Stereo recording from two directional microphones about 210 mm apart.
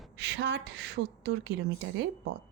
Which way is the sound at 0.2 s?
55° right (ahead or behind).